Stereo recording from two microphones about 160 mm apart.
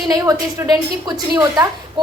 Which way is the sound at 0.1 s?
25° right (ahead or behind).